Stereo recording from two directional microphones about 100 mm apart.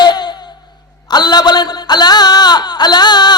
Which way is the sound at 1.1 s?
45° left (ahead or behind).